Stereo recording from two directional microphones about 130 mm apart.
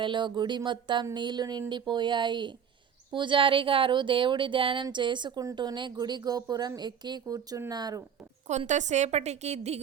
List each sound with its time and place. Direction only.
0.0 s speech: 35° right (ahead or behind)
8.4 s a woman's voice: 65° right (ahead or behind)